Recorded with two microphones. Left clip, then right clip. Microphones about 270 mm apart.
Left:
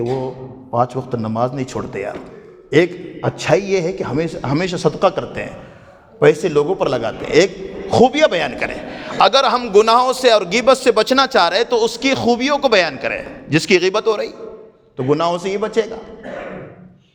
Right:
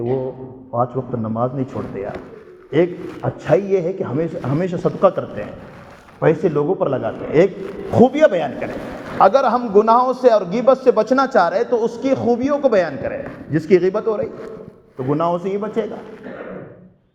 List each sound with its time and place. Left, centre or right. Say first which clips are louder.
0.7 s a man's voice: left 2 dB; left
1.4 s a man's voice: left 2 dB; left
1.7 s a man's voice: left 2 dB; left
2.6 s a man's voice: left 3 dB; left
4.1 s a man's voice: left 2 dB; left
4.6 s a man's voice: even; left
7.3 s a man's voice: left 1 dB; left
9.1 s a man's voice: left 1 dB; left